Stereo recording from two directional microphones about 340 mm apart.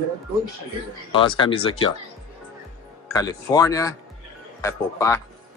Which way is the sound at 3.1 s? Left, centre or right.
Centre.